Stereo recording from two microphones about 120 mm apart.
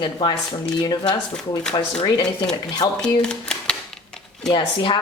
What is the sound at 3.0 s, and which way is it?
Speech, 5° left (ahead or behind).